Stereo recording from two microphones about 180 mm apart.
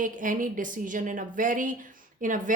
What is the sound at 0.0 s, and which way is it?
Speech, 50° right (ahead or behind).